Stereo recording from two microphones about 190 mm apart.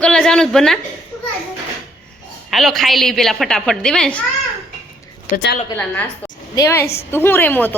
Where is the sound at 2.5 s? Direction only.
Centre (ahead or behind).